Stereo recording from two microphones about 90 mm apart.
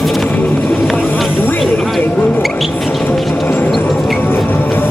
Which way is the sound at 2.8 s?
Centre (ahead or behind).